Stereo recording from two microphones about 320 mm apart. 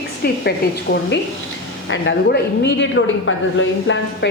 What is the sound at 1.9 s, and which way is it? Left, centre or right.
A woman's voice, left.